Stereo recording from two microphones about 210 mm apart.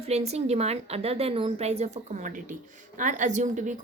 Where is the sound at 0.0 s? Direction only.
30° right (ahead or behind).